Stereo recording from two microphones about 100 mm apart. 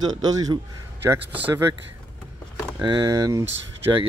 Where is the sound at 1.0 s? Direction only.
20° right (ahead or behind).